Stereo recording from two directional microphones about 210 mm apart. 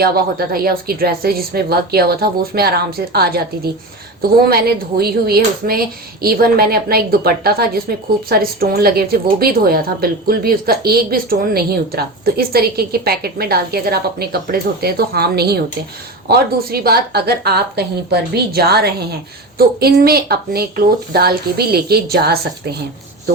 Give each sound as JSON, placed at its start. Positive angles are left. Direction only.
{"t": 0.0, "sound": "speech", "side_deg": -45}